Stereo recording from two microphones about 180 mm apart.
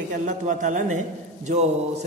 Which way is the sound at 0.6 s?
45° right (ahead or behind).